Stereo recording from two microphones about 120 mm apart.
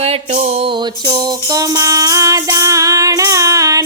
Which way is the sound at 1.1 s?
30° right (ahead or behind).